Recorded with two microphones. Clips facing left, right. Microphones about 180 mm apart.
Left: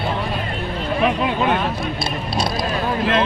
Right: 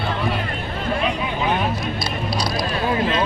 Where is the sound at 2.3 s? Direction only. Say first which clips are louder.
Left 2 dB; 25° left (ahead or behind).